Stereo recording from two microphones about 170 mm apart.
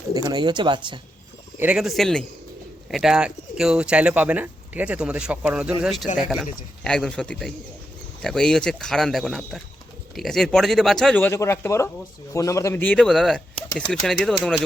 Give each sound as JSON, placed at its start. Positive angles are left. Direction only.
{"t": 0.1, "sound": "speech", "side_deg": -25}
{"t": 1.6, "sound": "a man's voice", "side_deg": -5}